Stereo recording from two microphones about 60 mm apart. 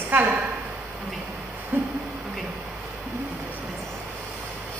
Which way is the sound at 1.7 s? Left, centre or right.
Right.